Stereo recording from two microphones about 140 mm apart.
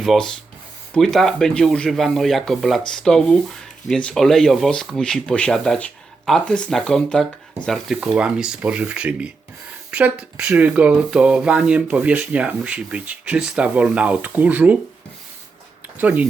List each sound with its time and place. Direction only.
0.0 s speech: centre (ahead or behind)
16.0 s speech: 10° right (ahead or behind)